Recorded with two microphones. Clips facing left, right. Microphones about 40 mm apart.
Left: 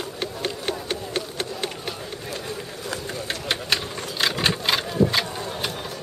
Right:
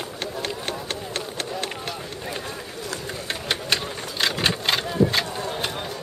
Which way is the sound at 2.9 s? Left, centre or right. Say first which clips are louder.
Left 1 dB; centre.